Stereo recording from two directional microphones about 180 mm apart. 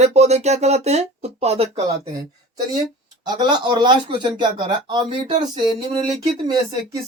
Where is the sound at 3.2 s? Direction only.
25° right (ahead or behind).